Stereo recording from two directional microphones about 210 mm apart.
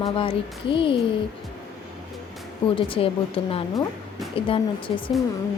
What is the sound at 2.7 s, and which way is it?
A woman's voice, 25° left (ahead or behind).